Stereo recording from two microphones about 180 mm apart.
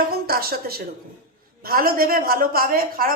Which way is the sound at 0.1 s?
55° right (ahead or behind).